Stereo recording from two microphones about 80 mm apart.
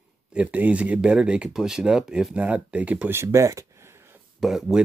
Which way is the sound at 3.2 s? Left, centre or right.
Right.